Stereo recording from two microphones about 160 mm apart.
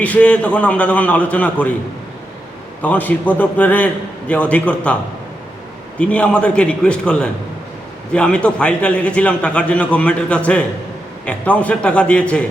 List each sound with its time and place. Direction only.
0.0 s a man's voice: 10° left (ahead or behind)
2.8 s a man's voice: 10° left (ahead or behind)
6.0 s a man's voice: 5° left (ahead or behind)